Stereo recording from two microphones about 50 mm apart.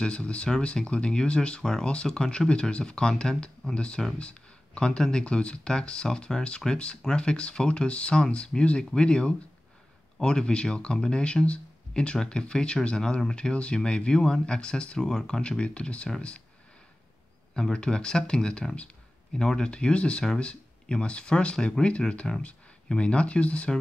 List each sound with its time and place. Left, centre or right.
0.0 s speech: left
1.6 s speech: centre
17.6 s speech: centre